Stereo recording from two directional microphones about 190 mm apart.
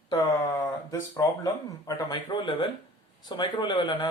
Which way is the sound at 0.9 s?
20° left (ahead or behind).